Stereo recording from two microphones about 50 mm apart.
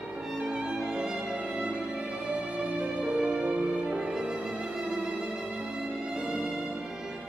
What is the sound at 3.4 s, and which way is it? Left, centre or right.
Music, right.